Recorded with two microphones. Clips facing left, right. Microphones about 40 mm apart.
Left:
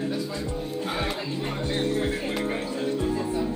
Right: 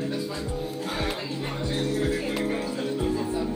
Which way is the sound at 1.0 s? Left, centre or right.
Centre.